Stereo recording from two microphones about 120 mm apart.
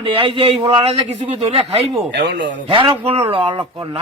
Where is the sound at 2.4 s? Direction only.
45° right (ahead or behind).